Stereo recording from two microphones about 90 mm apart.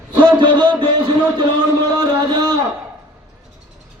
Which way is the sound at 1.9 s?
50° right (ahead or behind).